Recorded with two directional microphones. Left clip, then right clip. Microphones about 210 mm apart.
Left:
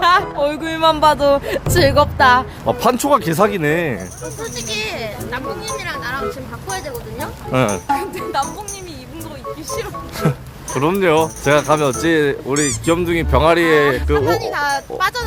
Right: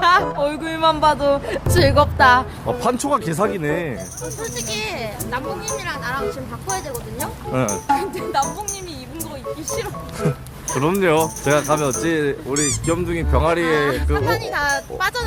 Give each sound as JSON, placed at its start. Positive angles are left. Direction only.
{"t": 0.0, "sound": "a sound", "side_deg": 10}
{"t": 1.7, "sound": "speech", "side_deg": 5}
{"t": 2.6, "sound": "speech", "side_deg": 40}
{"t": 4.5, "sound": "speech", "side_deg": 25}
{"t": 7.5, "sound": "speech", "side_deg": 50}
{"t": 7.9, "sound": "speech", "side_deg": 15}
{"t": 10.2, "sound": "speech", "side_deg": 40}
{"t": 10.8, "sound": "speech", "side_deg": 15}
{"t": 11.4, "sound": "speech", "side_deg": 30}
{"t": 14.2, "sound": "speech", "side_deg": 5}